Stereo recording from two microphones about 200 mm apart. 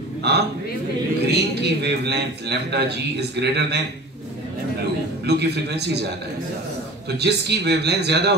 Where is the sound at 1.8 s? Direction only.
55° right (ahead or behind).